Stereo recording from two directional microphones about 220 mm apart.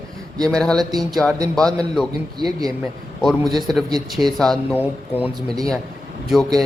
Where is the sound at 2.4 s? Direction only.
15° right (ahead or behind).